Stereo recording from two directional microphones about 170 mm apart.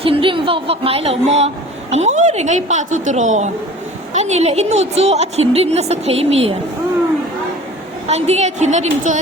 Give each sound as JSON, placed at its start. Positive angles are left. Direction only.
{"t": 0.0, "sound": "a woman's voice", "side_deg": -30}
{"t": 8.0, "sound": "a woman's voice", "side_deg": -40}